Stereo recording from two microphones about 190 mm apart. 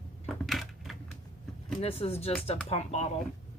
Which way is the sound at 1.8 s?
30° left (ahead or behind).